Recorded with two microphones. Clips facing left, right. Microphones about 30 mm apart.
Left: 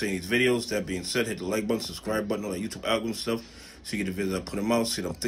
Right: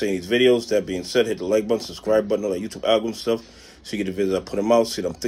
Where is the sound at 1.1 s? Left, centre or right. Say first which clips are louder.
Right 9 dB; centre.